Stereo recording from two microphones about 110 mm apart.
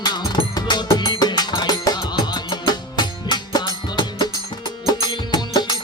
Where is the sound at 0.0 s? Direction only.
40° left (ahead or behind).